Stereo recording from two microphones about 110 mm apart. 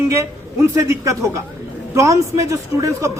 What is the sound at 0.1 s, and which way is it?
A man's voice, 25° right (ahead or behind).